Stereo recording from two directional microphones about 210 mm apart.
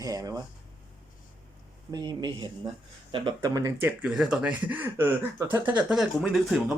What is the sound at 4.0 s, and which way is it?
Speech, 5° right (ahead or behind).